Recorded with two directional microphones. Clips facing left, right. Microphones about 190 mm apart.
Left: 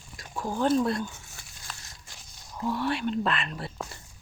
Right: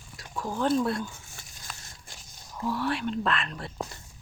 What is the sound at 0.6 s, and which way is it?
Speech, centre (ahead or behind).